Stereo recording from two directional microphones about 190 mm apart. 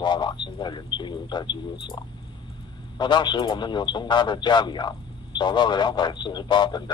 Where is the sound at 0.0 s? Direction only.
25° left (ahead or behind).